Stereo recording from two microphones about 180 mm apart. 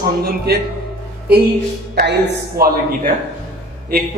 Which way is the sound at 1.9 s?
65° right (ahead or behind).